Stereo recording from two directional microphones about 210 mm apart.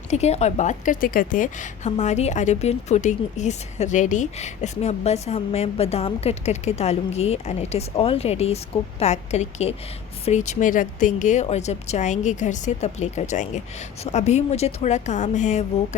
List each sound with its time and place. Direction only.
0.1 s a woman's voice: 30° left (ahead or behind)